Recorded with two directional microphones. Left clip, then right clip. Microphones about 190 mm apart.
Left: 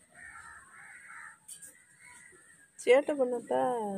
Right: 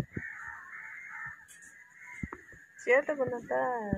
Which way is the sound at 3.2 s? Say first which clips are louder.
Left 2 dB; 45° left (ahead or behind).